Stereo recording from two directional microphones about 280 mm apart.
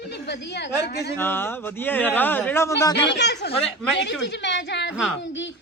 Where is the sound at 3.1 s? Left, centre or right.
Left.